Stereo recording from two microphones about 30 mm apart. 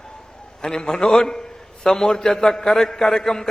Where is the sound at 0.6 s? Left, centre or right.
Left.